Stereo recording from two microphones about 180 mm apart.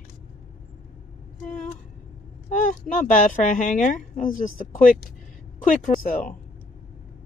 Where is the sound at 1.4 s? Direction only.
45° left (ahead or behind).